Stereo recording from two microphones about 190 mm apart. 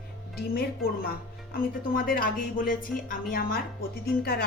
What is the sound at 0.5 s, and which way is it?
Speech, 50° left (ahead or behind).